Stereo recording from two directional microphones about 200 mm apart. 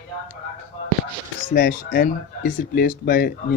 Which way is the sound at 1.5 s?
45° left (ahead or behind).